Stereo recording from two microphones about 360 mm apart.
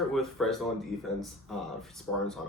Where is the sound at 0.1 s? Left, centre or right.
Centre.